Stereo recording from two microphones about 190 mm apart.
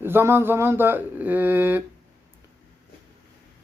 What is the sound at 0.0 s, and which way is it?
Speech, 10° right (ahead or behind).